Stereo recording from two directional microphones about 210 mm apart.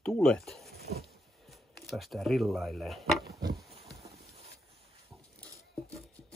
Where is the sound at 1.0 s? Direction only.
Centre (ahead or behind).